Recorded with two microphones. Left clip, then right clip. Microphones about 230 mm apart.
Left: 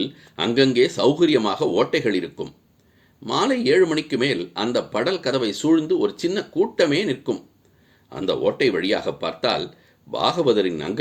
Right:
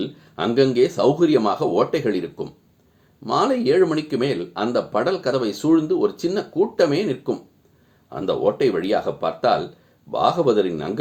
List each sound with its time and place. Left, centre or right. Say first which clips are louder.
0.0 s speech: even; left